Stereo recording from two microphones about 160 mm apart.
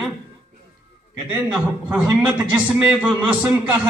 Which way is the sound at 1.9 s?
5° right (ahead or behind).